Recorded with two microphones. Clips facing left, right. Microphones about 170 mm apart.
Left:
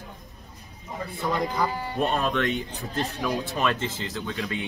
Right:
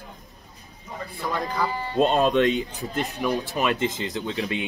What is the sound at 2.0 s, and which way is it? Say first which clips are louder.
Speech: right 6 dB; 20° right (ahead or behind).